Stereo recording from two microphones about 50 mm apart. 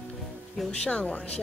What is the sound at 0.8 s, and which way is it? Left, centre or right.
Speech, left.